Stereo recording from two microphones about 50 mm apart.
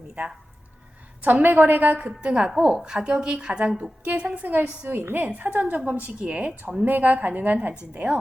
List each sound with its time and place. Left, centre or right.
1.2 s a woman's voice: right; by 3.8 s centre
4.4 s a woman's voice: right
6.8 s a woman's voice: right
7.9 s speech: right